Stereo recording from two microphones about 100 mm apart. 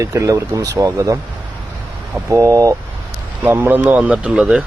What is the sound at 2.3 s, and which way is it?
Speech, 35° right (ahead or behind).